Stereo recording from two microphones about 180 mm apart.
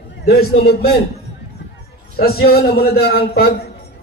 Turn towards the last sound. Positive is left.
turn(degrees=60)  # may be behind; listen again after turning